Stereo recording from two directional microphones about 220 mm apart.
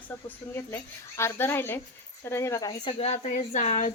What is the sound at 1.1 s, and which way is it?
A woman's voice, 10° left (ahead or behind).